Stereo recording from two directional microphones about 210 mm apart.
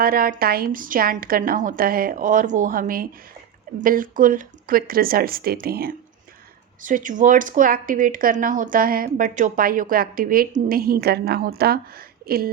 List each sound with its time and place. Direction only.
0.0 s a woman's voice: 45° right (ahead or behind)